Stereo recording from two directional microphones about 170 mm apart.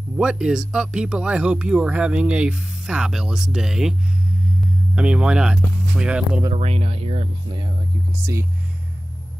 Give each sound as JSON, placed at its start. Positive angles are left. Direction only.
{"t": 0.2, "sound": "speech", "side_deg": -5}
{"t": 4.9, "sound": "speech", "side_deg": -5}
{"t": 6.5, "sound": "speech", "side_deg": -35}